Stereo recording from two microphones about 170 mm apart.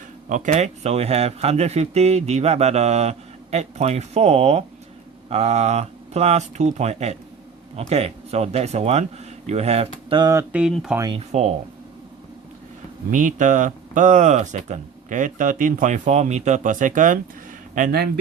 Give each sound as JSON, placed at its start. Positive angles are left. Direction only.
{"t": 0.3, "sound": "speech", "side_deg": -45}
{"t": 10.5, "sound": "speech", "side_deg": -5}
{"t": 10.9, "sound": "speech", "side_deg": -25}
{"t": 11.2, "sound": "speech", "side_deg": -40}
{"t": 13.1, "sound": "speech", "side_deg": -50}